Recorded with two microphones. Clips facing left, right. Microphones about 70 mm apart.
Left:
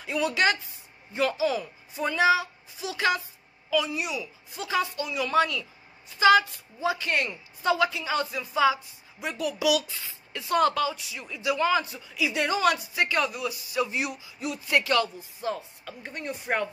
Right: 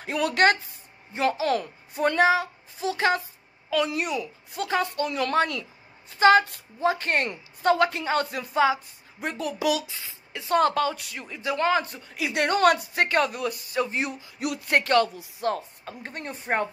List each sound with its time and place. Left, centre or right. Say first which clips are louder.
0.0 s a woman's voice: right 3 dB; right
1.1 s a woman's voice: right 2 dB; right
1.4 s a woman's voice: right 1 dB; right
3.7 s a woman's voice: right 2 dB; right
9.2 s a woman's voice: even; right
9.8 s a woman's voice: left 2 dB; right
14.4 s a woman's voice: right 2 dB; right
15.0 s speech: right 4 dB; right
15.5 s a woman's voice: right 4 dB; right